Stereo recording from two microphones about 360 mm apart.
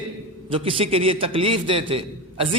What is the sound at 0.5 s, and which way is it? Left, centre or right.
A man's voice, centre.